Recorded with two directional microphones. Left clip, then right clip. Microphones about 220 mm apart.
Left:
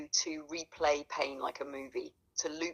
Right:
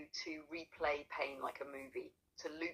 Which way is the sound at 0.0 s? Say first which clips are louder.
Left 11 dB; 45° left (ahead or behind).